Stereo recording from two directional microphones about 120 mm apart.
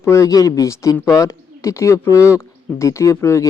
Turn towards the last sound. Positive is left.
turn(degrees=25)  # may be behind; listen again after turning